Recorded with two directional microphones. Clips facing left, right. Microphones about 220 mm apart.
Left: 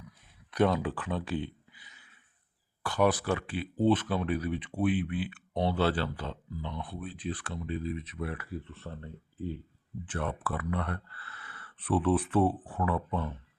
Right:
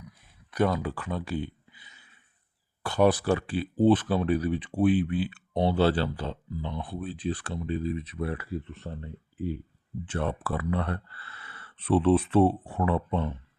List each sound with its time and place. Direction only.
0.5 s speech: centre (ahead or behind)
1.7 s a sound: 25° right (ahead or behind)
2.8 s speech: 25° right (ahead or behind)
10.1 s speech: 30° right (ahead or behind)